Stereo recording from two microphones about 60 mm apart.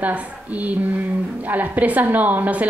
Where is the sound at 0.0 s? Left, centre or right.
Right.